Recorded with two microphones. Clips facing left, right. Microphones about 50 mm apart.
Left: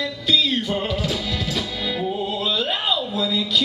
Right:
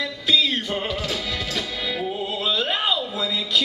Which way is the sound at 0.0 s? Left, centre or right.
Centre.